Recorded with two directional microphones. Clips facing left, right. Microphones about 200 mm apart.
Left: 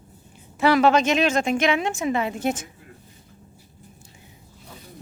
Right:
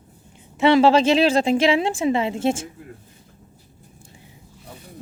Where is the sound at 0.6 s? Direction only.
25° right (ahead or behind).